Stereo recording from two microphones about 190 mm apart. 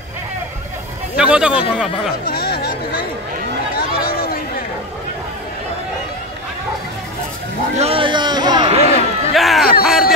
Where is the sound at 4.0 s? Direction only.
50° left (ahead or behind).